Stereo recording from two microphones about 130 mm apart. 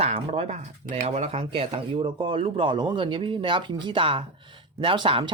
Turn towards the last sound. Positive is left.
turn(degrees=-40)  # may be behind; listen again after turning